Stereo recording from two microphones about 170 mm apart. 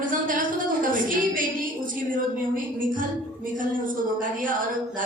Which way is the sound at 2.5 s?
55° right (ahead or behind).